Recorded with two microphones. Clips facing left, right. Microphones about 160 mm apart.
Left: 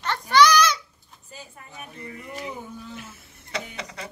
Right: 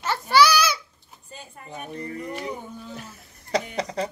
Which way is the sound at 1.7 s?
40° right (ahead or behind).